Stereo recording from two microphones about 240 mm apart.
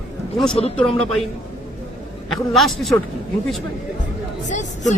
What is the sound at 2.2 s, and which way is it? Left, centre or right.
Speech, centre.